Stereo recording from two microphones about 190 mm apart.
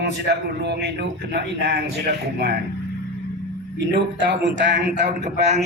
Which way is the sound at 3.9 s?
70° right (ahead or behind).